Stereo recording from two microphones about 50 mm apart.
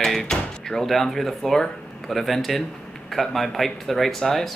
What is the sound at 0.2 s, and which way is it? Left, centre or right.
Speech, centre.